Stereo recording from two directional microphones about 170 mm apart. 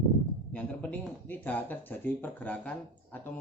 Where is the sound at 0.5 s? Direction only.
10° left (ahead or behind).